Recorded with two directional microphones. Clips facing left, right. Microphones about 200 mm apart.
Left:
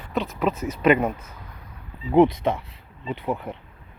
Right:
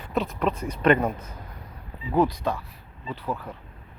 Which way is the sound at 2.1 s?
20° left (ahead or behind).